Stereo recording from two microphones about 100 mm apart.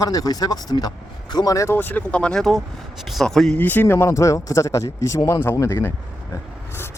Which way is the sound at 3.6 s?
20° left (ahead or behind).